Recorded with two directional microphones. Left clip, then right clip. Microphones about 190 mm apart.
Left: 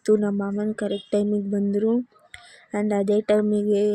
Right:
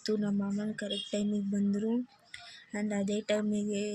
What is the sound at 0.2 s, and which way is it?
Speech, 20° left (ahead or behind).